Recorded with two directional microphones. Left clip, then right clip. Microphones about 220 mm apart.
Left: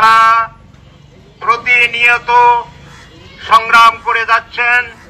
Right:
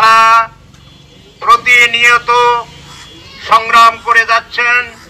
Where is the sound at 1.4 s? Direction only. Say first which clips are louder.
Right 4 dB; 10° left (ahead or behind).